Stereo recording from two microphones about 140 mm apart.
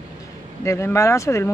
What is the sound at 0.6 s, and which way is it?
Speech, 20° left (ahead or behind).